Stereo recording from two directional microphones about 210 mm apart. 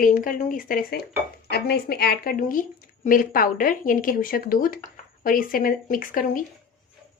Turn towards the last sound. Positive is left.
turn(degrees=40)  # may be behind; listen again after turning